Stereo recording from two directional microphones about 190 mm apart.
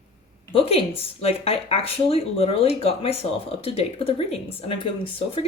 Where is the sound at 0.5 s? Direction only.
30° left (ahead or behind).